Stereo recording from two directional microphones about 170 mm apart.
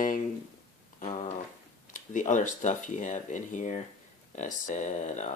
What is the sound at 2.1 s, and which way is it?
Speech, 45° left (ahead or behind).